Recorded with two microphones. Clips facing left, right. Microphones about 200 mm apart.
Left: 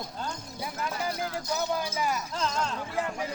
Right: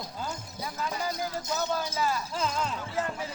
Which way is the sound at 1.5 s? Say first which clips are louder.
Even; 15° left (ahead or behind).